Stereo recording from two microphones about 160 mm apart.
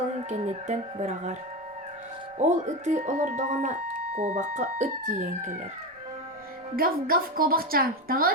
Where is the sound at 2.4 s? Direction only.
50° right (ahead or behind).